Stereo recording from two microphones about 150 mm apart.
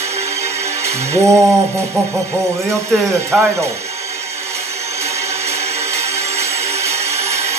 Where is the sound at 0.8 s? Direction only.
20° right (ahead or behind).